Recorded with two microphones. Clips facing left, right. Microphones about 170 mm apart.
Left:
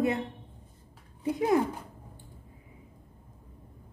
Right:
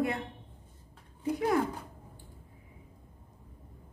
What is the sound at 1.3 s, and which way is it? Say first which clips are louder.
Speech: left 3 dB; 20° left (ahead or behind).